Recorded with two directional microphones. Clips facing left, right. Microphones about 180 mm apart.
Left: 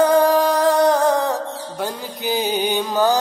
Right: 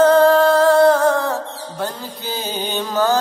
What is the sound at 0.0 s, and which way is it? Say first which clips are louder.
Music: right 3 dB; 15° left (ahead or behind).